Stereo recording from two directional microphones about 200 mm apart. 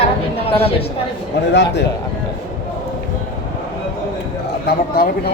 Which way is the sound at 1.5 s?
60° left (ahead or behind).